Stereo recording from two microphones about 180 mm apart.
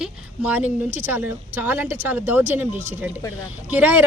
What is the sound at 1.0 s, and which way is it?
Speech, 10° right (ahead or behind).